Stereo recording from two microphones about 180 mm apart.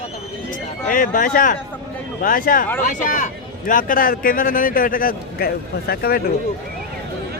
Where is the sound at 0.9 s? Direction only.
50° left (ahead or behind).